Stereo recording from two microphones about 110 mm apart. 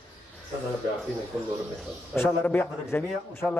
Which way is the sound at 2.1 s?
15° left (ahead or behind).